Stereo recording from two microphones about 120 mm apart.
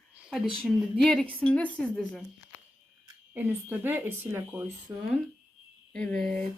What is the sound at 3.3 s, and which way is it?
Speech, 15° right (ahead or behind).